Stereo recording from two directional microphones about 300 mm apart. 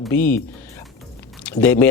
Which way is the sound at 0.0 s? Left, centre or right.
Centre.